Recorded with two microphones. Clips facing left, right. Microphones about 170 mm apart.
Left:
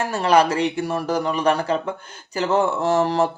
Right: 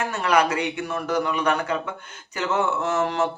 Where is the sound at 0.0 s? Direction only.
30° left (ahead or behind).